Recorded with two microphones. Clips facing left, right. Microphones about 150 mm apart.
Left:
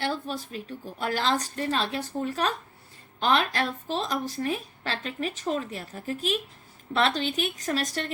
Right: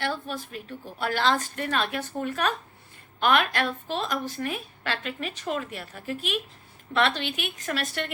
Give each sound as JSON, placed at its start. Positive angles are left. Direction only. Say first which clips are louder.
{"t": 0.0, "sound": "a woman's voice", "louder": "left 1 dB", "side_deg": 35}